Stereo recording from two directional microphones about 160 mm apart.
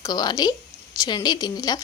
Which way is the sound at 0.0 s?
25° left (ahead or behind).